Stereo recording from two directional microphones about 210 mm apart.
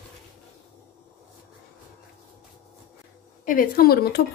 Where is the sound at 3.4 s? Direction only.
45° left (ahead or behind).